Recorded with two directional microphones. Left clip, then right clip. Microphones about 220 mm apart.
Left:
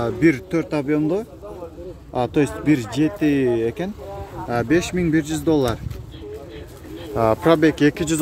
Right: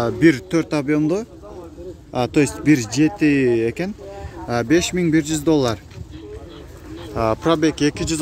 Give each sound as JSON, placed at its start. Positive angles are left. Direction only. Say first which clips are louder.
{"t": 0.0, "sound": "a man's voice", "louder": "right 2 dB", "side_deg": -30}
{"t": 7.2, "sound": "speech", "louder": "left 2 dB", "side_deg": 0}